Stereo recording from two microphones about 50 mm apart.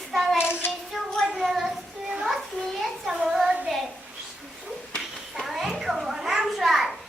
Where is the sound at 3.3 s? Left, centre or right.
Centre.